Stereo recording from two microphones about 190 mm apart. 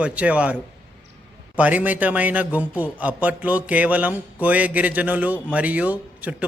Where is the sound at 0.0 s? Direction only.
5° right (ahead or behind).